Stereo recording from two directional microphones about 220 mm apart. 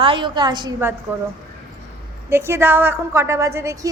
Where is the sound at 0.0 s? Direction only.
25° right (ahead or behind).